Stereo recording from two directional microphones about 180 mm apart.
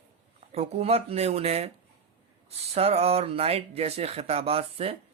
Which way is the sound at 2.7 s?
35° right (ahead or behind).